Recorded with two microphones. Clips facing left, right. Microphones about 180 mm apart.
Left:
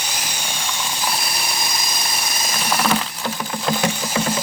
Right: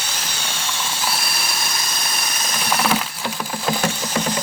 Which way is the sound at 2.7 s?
10° right (ahead or behind).